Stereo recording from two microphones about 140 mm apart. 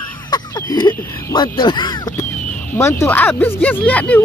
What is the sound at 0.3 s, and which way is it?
Speech, 30° left (ahead or behind).